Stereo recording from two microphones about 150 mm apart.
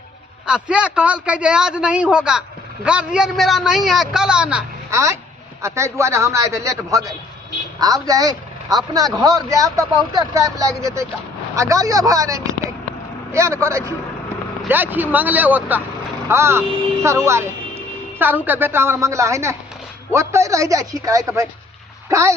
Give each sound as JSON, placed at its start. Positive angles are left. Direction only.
{"t": 0.4, "sound": "a man's voice", "side_deg": -5}
{"t": 4.9, "sound": "a man's voice", "side_deg": -20}